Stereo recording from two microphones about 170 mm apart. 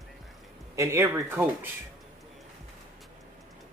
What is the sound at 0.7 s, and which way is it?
Speech, 15° right (ahead or behind).